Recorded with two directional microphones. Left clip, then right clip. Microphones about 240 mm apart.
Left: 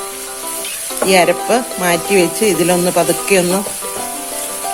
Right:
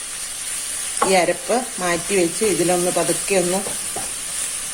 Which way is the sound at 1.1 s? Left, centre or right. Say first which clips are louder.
Left 7 dB; left.